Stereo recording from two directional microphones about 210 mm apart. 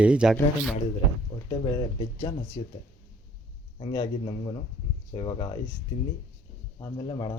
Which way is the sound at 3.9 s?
25° left (ahead or behind).